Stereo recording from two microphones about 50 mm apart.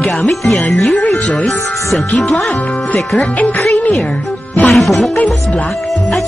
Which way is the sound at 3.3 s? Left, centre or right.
Left.